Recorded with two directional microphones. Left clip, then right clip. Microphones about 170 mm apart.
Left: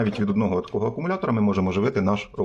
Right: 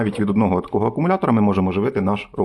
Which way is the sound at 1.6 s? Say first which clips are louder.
Right 3 dB; 15° right (ahead or behind).